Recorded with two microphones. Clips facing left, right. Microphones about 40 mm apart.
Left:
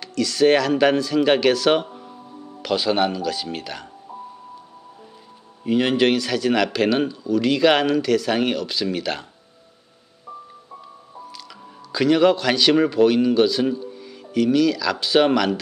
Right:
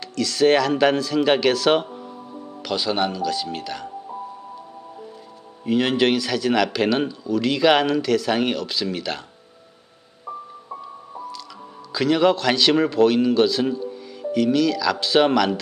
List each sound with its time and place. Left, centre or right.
0.0 s a man's voice: centre
2.1 s music: centre
2.6 s a man's voice: centre
5.6 s a man's voice: centre
10.2 s music: right
11.9 s a man's voice: centre